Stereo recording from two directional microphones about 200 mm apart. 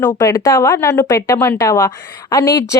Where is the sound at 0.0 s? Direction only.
15° left (ahead or behind).